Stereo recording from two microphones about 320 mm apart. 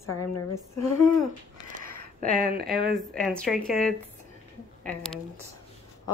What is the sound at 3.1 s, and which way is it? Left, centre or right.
A woman's voice, centre.